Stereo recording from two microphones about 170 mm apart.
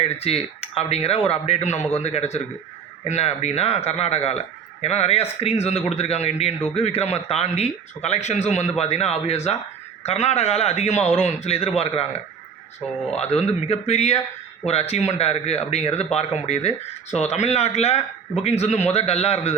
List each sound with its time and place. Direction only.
0.0 s a man's voice: 35° left (ahead or behind)
13.1 s a man's voice: 40° left (ahead or behind)